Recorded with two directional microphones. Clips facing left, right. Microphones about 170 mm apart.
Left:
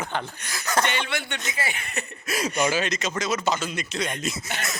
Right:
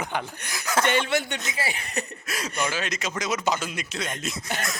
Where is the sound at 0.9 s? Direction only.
40° right (ahead or behind).